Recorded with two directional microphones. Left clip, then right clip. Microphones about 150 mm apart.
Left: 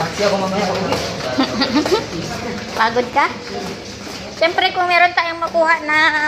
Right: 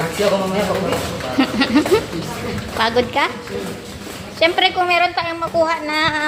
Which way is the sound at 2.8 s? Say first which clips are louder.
Left 1 dB; 30° right (ahead or behind).